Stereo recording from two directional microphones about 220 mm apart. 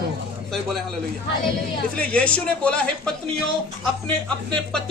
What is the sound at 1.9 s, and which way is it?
Speech, 5° left (ahead or behind).